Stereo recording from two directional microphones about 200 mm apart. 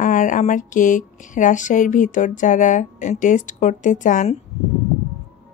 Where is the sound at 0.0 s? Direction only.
40° left (ahead or behind).